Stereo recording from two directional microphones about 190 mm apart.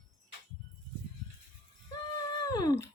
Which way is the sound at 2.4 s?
20° left (ahead or behind).